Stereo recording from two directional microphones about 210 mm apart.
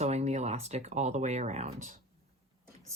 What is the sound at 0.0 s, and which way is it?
Speech, 30° right (ahead or behind).